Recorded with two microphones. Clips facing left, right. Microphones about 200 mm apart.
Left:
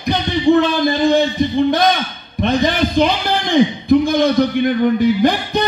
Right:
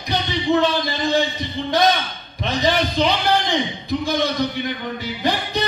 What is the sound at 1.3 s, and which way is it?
Speech, 55° left (ahead or behind).